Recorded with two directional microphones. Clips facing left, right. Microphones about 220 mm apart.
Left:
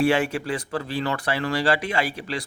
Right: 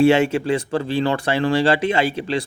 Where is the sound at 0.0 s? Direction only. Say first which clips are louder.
Right 6 dB; 25° right (ahead or behind).